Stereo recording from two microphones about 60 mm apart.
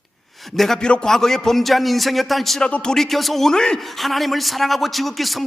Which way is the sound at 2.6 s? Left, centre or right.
Centre.